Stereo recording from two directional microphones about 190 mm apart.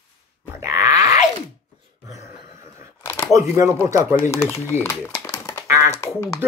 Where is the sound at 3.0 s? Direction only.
15° left (ahead or behind).